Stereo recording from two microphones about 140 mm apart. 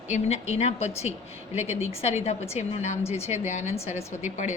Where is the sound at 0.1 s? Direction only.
50° left (ahead or behind).